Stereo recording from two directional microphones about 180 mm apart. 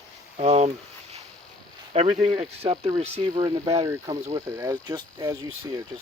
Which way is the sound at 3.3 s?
20° right (ahead or behind).